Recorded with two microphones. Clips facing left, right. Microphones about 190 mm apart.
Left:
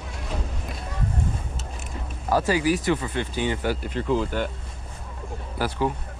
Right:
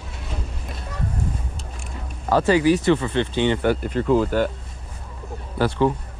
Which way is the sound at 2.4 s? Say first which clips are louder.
Right 8 dB; 25° right (ahead or behind).